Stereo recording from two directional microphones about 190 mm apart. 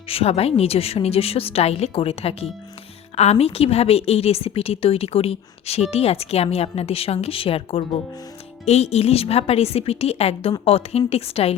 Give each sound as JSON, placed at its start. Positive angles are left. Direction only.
{"t": 0.1, "sound": "a woman's voice", "side_deg": 30}